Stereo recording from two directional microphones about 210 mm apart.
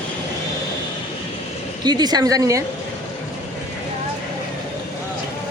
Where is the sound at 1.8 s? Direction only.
20° right (ahead or behind).